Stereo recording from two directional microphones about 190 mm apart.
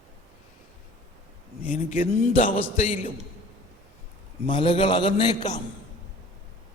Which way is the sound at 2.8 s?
40° left (ahead or behind).